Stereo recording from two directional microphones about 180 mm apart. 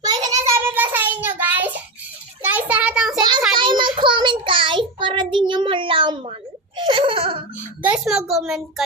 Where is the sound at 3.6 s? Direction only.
25° right (ahead or behind).